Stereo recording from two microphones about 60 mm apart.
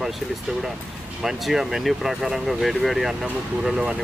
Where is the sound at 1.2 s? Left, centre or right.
Centre.